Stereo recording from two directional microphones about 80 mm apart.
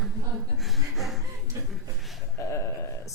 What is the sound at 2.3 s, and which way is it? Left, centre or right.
Speech, left.